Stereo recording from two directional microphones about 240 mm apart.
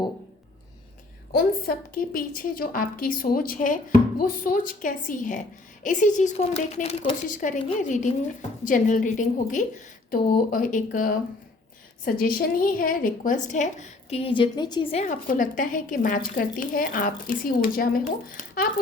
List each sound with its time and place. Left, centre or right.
1.3 s a woman's voice: left